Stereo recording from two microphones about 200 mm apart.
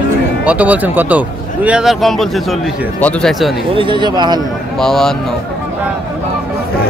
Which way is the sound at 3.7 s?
25° right (ahead or behind).